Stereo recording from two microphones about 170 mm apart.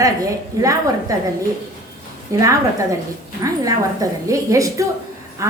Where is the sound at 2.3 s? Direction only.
20° right (ahead or behind).